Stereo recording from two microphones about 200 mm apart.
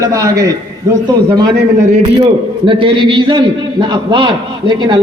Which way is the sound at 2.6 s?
25° right (ahead or behind).